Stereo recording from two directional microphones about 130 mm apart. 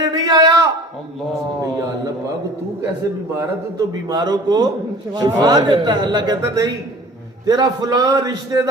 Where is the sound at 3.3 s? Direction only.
30° right (ahead or behind).